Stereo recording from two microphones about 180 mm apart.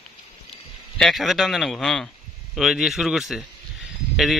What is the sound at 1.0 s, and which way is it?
A man's voice, centre (ahead or behind).